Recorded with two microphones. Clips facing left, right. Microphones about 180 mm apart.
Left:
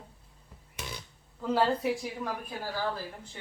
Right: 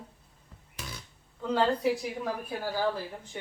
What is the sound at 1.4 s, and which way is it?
Speech, 5° left (ahead or behind).